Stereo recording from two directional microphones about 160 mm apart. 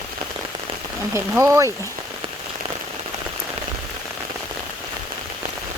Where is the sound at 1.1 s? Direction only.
15° right (ahead or behind).